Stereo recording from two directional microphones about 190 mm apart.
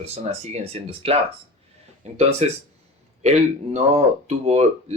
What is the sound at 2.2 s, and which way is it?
Speech, 35° right (ahead or behind).